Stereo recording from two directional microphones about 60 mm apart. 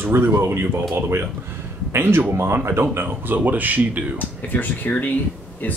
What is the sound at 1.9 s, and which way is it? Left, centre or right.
Speech, right.